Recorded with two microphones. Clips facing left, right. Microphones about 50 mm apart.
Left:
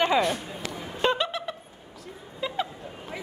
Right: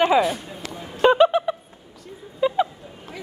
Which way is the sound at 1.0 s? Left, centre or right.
Centre.